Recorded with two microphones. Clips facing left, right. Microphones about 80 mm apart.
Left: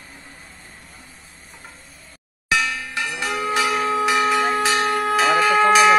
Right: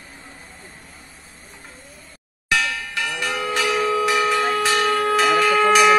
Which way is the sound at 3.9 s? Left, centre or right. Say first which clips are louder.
Even; left.